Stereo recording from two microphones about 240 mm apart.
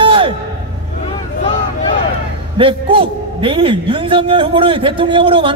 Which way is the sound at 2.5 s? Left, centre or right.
Right.